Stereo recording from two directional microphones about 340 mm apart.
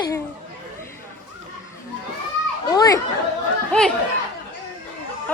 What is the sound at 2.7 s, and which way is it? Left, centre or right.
Speech, centre.